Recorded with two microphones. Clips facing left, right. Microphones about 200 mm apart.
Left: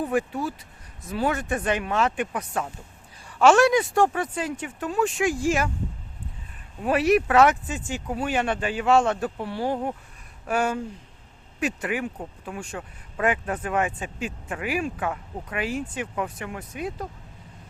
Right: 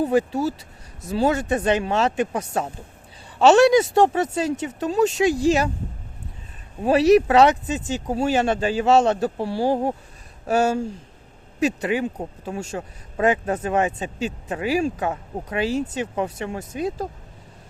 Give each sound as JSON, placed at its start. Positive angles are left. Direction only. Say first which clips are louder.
{"t": 0.0, "sound": "speech", "louder": "right 5 dB", "side_deg": -30}
{"t": 4.8, "sound": "speech", "louder": "right 5 dB", "side_deg": -35}
{"t": 6.8, "sound": "speech", "louder": "right 5 dB", "side_deg": -25}
{"t": 7.8, "sound": "speech", "louder": "right 5 dB", "side_deg": -35}